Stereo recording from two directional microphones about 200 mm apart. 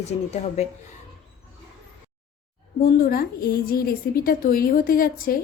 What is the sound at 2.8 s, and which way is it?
A woman's voice, 50° left (ahead or behind).